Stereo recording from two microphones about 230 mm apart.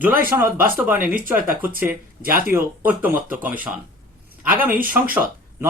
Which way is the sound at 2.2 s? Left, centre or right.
Right.